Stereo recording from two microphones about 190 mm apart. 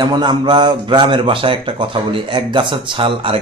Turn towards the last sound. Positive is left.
turn(degrees=-30)  # may be behind; listen again after turning